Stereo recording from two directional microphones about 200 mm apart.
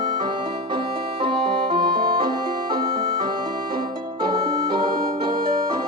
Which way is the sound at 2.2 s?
20° right (ahead or behind).